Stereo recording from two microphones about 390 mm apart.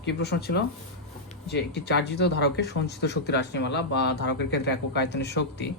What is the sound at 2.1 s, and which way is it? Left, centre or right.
A man's voice, left.